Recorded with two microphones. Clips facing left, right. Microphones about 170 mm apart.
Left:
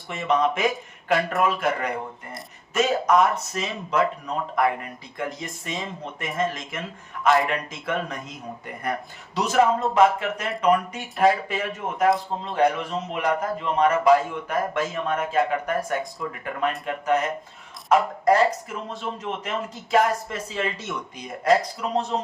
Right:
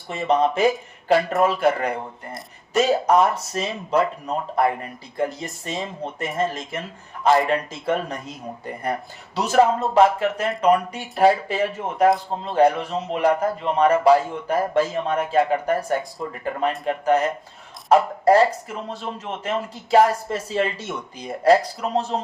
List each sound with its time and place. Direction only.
0.1 s a man's voice: 30° right (ahead or behind)